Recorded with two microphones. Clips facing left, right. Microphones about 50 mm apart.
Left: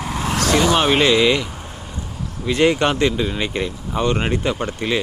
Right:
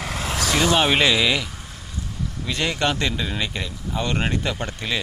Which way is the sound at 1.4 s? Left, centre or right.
Left.